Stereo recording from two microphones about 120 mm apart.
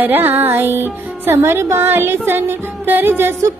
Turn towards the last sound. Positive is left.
turn(degrees=-20)  # may be behind; listen again after turning